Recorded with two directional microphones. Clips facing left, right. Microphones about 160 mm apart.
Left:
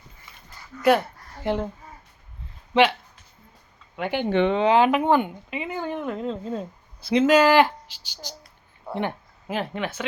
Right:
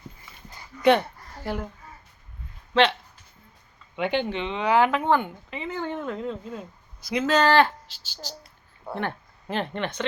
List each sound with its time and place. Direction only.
0.8 s speech: 5° left (ahead or behind)
1.4 s speech: 20° left (ahead or behind)
2.7 s speech: 20° left (ahead or behind)
3.9 s speech: 10° left (ahead or behind)
4.3 s speech: 55° left (ahead or behind)
4.6 s speech: 20° left (ahead or behind)
6.4 s speech: 30° left (ahead or behind)
7.3 s speech: 10° left (ahead or behind)